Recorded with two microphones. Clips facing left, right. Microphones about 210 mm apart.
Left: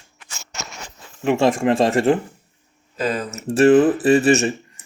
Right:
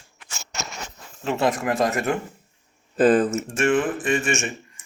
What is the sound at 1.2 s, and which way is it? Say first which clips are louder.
Speech: left 6 dB; 20° left (ahead or behind).